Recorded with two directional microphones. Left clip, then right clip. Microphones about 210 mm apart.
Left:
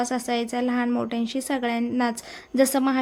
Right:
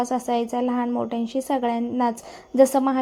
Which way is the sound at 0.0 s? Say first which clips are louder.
Right 2 dB; 10° left (ahead or behind).